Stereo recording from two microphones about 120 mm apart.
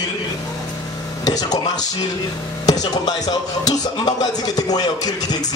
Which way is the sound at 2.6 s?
35° left (ahead or behind).